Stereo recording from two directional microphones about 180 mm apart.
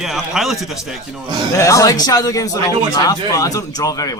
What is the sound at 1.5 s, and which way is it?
A man's voice, 20° left (ahead or behind).